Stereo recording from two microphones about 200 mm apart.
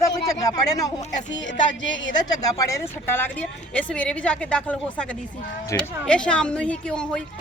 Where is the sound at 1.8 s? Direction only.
65° left (ahead or behind).